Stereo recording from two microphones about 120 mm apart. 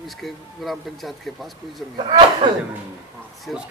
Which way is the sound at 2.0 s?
45° right (ahead or behind).